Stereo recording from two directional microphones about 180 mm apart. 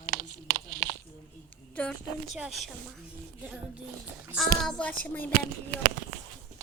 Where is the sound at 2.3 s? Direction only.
Centre (ahead or behind).